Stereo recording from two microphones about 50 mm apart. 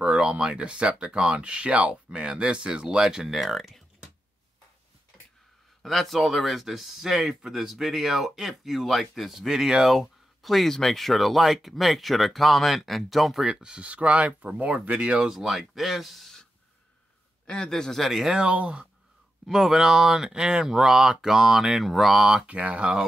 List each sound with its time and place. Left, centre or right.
0.0 s speech: centre
5.8 s speech: centre
9.9 s speech: centre
13.6 s speech: centre
15.2 s speech: centre
17.5 s a man's voice: centre
18.2 s speech: centre
18.5 s speech: right
19.4 s speech: centre
22.5 s speech: right